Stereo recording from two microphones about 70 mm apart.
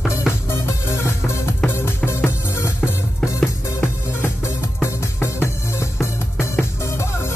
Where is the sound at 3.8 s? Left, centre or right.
Left.